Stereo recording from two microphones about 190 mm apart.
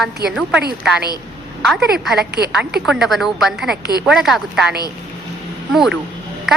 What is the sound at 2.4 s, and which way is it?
Speech, 20° left (ahead or behind).